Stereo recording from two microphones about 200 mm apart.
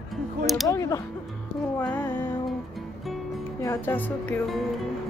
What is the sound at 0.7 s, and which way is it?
Speech, 15° left (ahead or behind).